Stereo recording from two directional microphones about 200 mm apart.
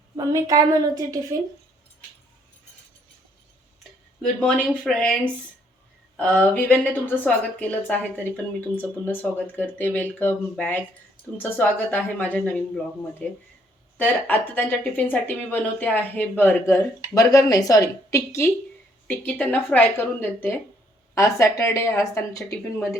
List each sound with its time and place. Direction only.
0.2 s a woman's voice: 15° right (ahead or behind)
4.2 s speech: 5° left (ahead or behind)